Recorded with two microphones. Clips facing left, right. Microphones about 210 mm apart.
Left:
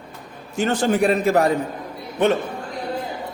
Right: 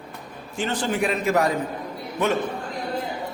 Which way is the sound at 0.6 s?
40° left (ahead or behind).